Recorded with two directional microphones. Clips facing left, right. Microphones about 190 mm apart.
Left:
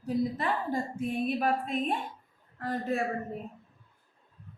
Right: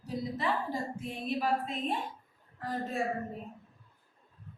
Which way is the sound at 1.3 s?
55° left (ahead or behind).